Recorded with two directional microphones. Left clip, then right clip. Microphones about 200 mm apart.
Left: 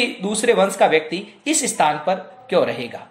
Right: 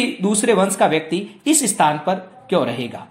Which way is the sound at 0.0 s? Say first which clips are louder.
Even; 20° right (ahead or behind).